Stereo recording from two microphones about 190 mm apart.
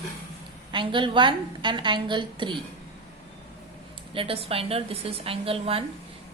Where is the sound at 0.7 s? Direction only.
25° right (ahead or behind).